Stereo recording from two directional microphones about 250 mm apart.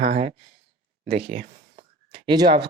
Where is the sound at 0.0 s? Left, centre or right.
Right.